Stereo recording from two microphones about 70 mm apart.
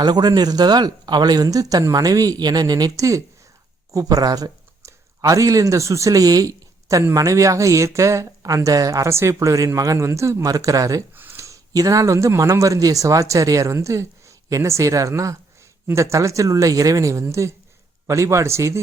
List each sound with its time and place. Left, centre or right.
0.0 s speech: right
3.9 s speech: right
4.8 s speech: right
11.1 s a sound: right
11.3 s speech: right